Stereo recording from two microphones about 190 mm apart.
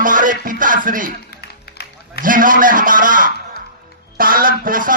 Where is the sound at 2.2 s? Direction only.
45° right (ahead or behind).